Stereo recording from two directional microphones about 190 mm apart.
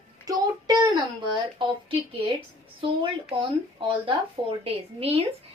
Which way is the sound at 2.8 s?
25° right (ahead or behind).